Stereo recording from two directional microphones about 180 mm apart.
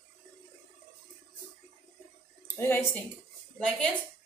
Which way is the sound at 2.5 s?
10° left (ahead or behind).